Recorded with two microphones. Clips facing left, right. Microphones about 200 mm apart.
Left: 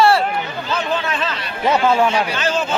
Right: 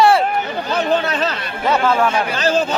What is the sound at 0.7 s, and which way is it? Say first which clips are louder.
Speech: right 4 dB; 35° right (ahead or behind).